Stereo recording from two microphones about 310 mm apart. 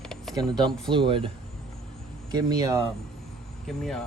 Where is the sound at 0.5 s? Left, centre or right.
Centre.